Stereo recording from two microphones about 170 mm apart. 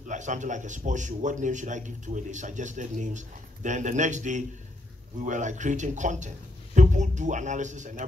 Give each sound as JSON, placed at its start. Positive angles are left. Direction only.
{"t": 0.1, "sound": "a man's voice", "side_deg": -45}